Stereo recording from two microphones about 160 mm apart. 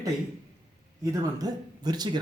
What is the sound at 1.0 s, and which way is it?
A man's voice, 20° right (ahead or behind).